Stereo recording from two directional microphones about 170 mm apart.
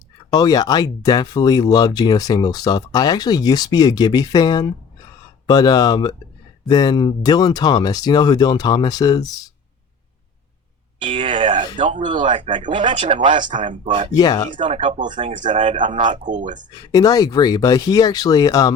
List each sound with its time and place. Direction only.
0.3 s speech: 20° left (ahead or behind)
11.0 s speech: 30° right (ahead or behind)
11.8 s speech: 45° right (ahead or behind)
12.4 s speech: 30° right (ahead or behind)
14.2 s speech: 20° left (ahead or behind)
14.5 s speech: 30° right (ahead or behind)
14.8 s speech: 45° right (ahead or behind)
16.7 s speech: 20° left (ahead or behind)